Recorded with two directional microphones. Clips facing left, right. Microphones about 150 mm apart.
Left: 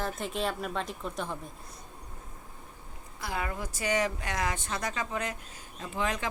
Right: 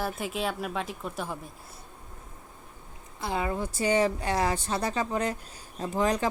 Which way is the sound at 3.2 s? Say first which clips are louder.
Right 5 dB; 25° right (ahead or behind).